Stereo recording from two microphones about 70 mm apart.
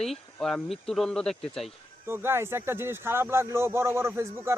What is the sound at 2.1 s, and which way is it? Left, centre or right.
Speech, right.